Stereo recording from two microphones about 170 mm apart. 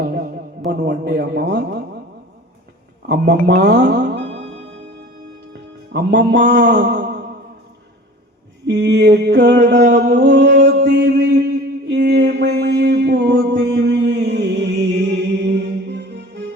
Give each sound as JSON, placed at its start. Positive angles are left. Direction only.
{"t": 0.7, "sound": "a man's voice", "side_deg": -85}
{"t": 3.1, "sound": "a man's voice", "side_deg": -75}
{"t": 4.3, "sound": "music", "side_deg": -40}
{"t": 5.5, "sound": "music", "side_deg": -75}
{"t": 8.6, "sound": "a sound", "side_deg": -90}
{"t": 12.4, "sound": "mantra", "side_deg": -90}